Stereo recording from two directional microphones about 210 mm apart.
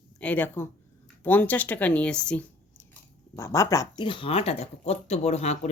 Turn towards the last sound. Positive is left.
turn(degrees=30)  # may be behind; listen again after turning